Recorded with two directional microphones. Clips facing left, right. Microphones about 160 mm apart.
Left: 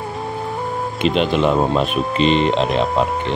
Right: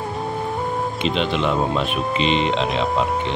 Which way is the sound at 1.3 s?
45° left (ahead or behind).